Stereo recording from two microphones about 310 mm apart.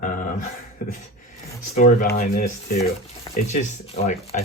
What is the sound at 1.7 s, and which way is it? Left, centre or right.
Speech, left.